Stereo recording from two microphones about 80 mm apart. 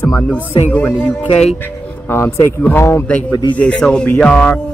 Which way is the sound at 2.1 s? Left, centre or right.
Left.